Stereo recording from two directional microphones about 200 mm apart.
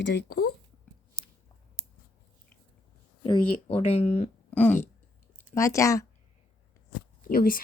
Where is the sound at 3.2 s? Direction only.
25° left (ahead or behind).